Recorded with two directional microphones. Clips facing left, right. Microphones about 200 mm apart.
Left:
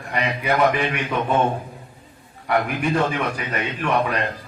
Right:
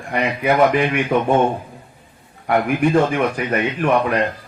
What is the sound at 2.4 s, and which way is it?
A man's voice, 50° right (ahead or behind).